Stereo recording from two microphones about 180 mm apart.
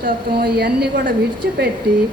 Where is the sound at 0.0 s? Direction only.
60° right (ahead or behind).